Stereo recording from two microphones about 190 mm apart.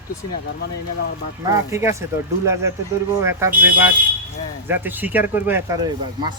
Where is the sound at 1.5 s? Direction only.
15° right (ahead or behind).